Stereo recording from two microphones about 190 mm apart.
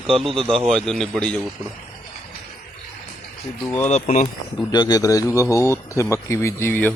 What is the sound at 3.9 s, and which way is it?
Speech, 40° left (ahead or behind).